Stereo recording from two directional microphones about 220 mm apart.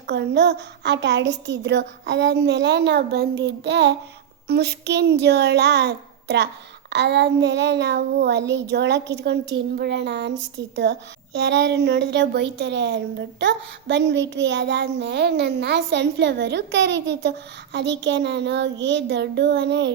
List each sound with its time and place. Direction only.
0.1 s speech: 50° right (ahead or behind)